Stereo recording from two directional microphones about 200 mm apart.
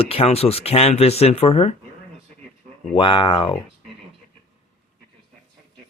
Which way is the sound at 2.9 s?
25° left (ahead or behind).